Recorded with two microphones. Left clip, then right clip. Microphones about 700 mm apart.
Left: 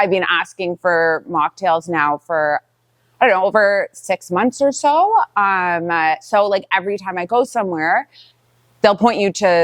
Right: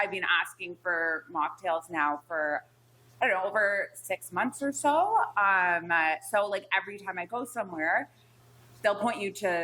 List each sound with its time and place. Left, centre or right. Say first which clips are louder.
0.0 s a woman's voice: left 12 dB; left
4.8 s a woman's voice: left 9 dB; left